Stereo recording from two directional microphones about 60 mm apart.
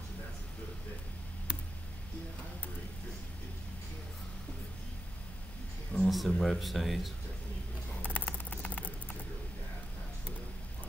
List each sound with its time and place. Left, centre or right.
6.0 s speech: centre
8.0 s mouse: left